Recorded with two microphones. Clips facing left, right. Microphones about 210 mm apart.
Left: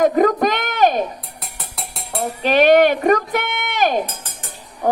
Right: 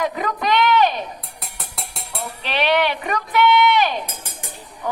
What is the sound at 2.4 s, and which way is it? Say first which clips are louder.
Speech: left 8 dB; 45° left (ahead or behind).